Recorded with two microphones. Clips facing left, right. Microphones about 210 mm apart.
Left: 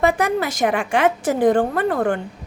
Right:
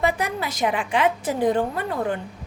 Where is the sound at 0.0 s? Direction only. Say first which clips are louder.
Left 5 dB; 45° left (ahead or behind).